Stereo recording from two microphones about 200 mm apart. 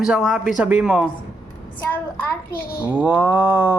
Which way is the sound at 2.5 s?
50° left (ahead or behind).